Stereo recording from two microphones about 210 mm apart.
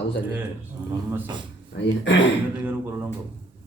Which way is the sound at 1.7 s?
55° left (ahead or behind).